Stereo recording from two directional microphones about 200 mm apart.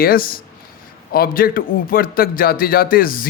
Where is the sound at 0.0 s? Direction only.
45° left (ahead or behind).